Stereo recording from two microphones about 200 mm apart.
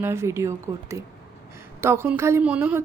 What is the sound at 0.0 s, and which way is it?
A woman's voice, 15° right (ahead or behind).